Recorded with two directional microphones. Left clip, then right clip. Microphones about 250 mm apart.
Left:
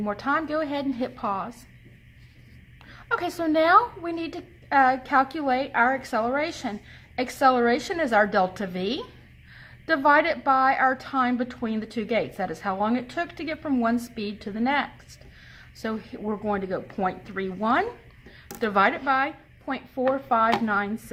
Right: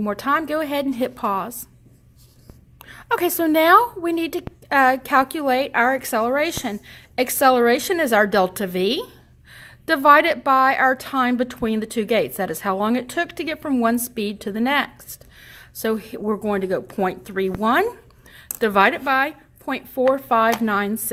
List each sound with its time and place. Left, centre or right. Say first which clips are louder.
0.0 s speech: right 5 dB; right
2.9 s a woman's voice: right 6 dB; right